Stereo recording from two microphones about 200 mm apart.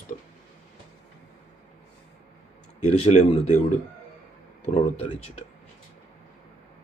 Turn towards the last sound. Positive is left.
turn(degrees=30)  # may be behind; listen again after turning